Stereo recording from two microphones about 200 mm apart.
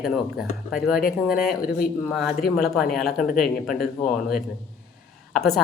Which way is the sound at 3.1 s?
45° left (ahead or behind).